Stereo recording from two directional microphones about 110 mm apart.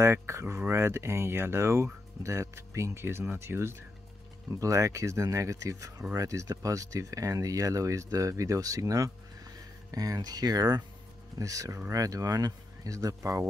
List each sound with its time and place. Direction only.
0.0 s speech: 25° right (ahead or behind)